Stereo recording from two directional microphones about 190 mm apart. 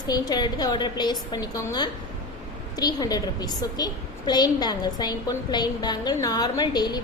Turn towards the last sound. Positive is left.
turn(degrees=20)  # may be behind; listen again after turning